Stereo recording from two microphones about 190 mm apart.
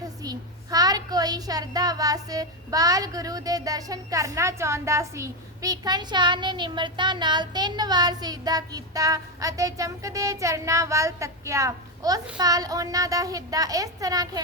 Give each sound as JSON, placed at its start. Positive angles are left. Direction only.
{"t": 0.0, "sound": "a child's voice", "side_deg": -20}